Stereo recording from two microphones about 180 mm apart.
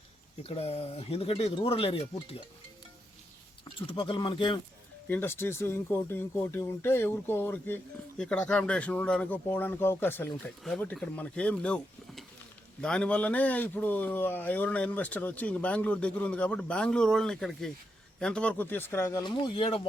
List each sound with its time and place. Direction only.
0.4 s speech: 35° left (ahead or behind)
3.6 s speech: 30° left (ahead or behind)
5.0 s speech: 10° left (ahead or behind)
19.2 s speech: 25° left (ahead or behind)